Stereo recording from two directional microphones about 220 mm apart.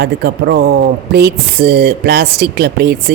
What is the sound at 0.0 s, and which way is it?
Speech, 45° right (ahead or behind).